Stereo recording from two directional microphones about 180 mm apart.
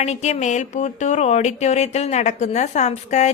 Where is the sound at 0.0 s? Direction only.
40° left (ahead or behind).